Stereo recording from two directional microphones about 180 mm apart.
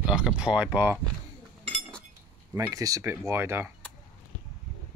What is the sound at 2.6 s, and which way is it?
Speech, 20° right (ahead or behind).